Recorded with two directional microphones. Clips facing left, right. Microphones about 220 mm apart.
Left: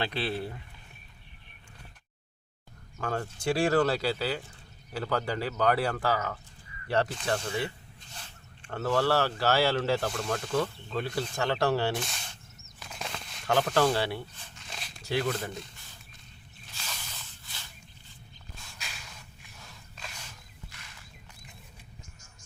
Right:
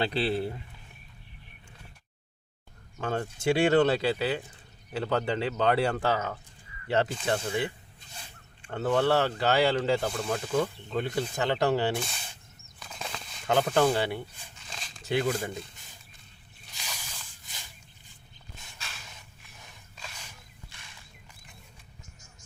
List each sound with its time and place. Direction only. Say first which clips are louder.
0.0 s speech: right 4 dB; 30° right (ahead or behind)
3.0 s speech: right 2 dB; 20° right (ahead or behind)
7.3 s speech: right 2 dB; 5° right (ahead or behind)
11.9 s speech: right 1 dB; centre (ahead or behind)
12.8 s a sound: even; centre (ahead or behind)
13.7 s speech: right 2 dB; 10° right (ahead or behind)
14.7 s a sound: even; 5° left (ahead or behind)
15.2 s speech: right 2 dB; 10° right (ahead or behind)
16.7 s a sound: even; 10° right (ahead or behind)